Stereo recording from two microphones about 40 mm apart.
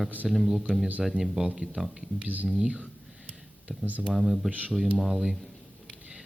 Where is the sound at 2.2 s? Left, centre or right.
Right.